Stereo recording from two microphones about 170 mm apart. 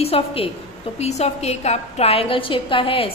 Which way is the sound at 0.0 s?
35° left (ahead or behind).